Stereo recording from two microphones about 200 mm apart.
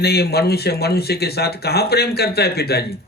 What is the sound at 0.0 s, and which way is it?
Speech, 55° left (ahead or behind).